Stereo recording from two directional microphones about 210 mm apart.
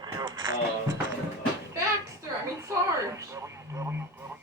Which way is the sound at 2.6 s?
15° right (ahead or behind).